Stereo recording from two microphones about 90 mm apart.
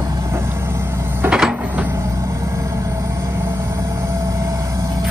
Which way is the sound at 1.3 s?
10° right (ahead or behind).